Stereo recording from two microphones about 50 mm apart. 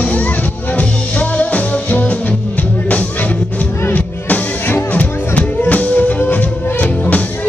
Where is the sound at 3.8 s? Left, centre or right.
Left.